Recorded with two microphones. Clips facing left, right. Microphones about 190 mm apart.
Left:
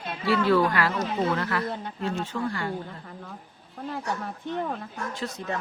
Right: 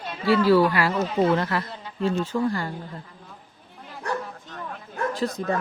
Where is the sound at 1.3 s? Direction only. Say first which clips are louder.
Right 2 dB; 25° right (ahead or behind).